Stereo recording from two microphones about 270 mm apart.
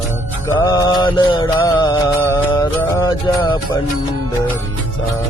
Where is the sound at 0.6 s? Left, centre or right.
Centre.